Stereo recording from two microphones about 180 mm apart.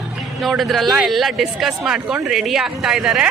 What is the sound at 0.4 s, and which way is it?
Speech, centre (ahead or behind).